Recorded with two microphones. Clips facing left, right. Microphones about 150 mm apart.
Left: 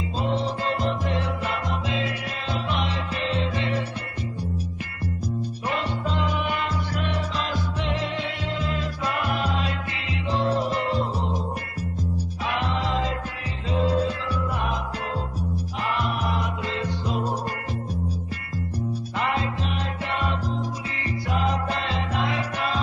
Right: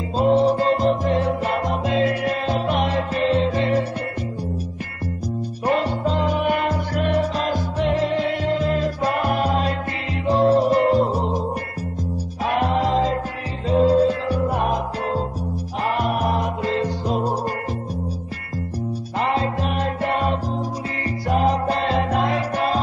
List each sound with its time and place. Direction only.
0.2 s music: 45° right (ahead or behind)
5.7 s music: 45° right (ahead or behind)
12.4 s music: 45° right (ahead or behind)
19.1 s music: 35° right (ahead or behind)
19.6 s music: 45° right (ahead or behind)